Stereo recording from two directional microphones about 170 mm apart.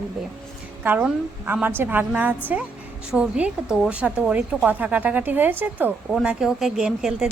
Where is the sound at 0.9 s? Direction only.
10° right (ahead or behind).